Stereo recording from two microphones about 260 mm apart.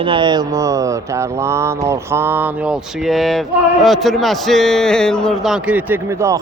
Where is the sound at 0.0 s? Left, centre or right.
Centre.